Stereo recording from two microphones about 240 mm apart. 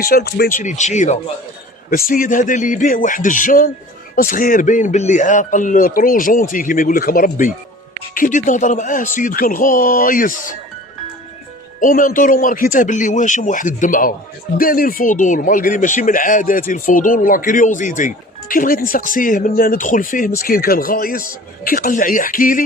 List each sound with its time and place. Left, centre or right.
0.0 s speech: left
11.8 s speech: left